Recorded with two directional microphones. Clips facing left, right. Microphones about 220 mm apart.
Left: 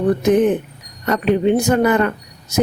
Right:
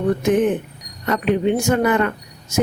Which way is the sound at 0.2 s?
35° left (ahead or behind).